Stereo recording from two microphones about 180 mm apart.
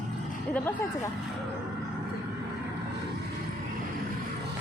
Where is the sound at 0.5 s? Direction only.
10° left (ahead or behind).